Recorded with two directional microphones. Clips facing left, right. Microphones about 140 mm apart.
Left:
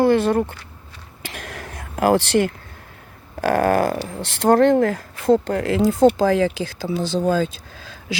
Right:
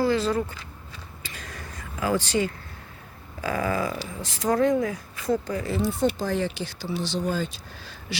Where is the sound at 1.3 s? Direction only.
80° left.